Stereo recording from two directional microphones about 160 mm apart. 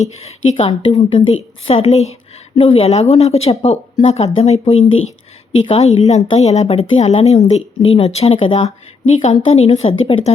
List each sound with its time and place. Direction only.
0.0 s a woman's voice: 40° left (ahead or behind)